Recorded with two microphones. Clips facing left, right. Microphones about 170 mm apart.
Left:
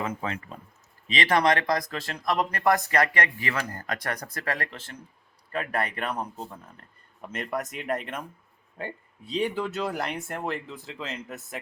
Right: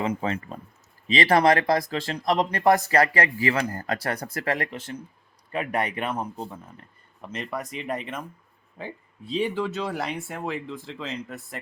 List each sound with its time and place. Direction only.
1.1 s speech: 30° right (ahead or behind); by 11.3 s 5° left (ahead or behind)